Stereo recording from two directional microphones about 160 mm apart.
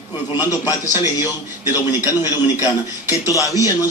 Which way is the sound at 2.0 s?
20° left (ahead or behind).